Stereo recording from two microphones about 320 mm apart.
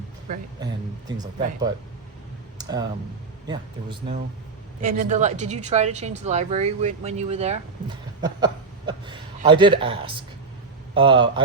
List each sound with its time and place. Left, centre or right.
0.6 s a man's voice: centre
2.6 s clicking: centre
3.4 s a man's voice: centre
4.8 s a woman's voice: right